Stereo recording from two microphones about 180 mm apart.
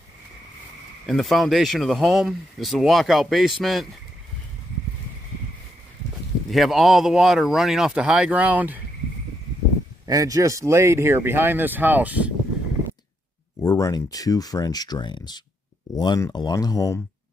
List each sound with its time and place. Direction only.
1.0 s speech: centre (ahead or behind)
6.5 s speech: centre (ahead or behind)
10.0 s speech: 20° right (ahead or behind)
13.6 s speech: 15° left (ahead or behind)